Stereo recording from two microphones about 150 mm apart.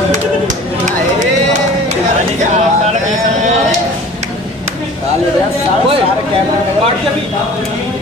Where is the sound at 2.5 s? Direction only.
50° right (ahead or behind).